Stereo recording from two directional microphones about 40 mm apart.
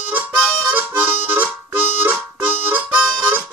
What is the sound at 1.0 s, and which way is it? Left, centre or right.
Harmonica, right.